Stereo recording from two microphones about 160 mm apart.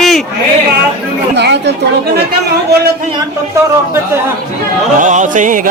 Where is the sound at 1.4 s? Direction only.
90° right.